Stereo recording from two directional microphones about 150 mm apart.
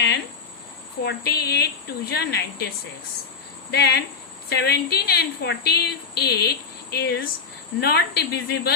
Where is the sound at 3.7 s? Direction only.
90° left.